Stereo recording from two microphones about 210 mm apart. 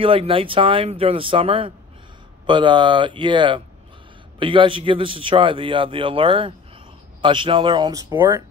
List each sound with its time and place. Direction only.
0.0 s a man's voice: 25° right (ahead or behind)